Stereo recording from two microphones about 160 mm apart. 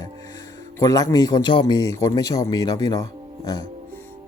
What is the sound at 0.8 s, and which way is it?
Speech, 20° left (ahead or behind).